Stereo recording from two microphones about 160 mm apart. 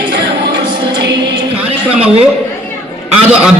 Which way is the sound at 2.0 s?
40° right (ahead or behind).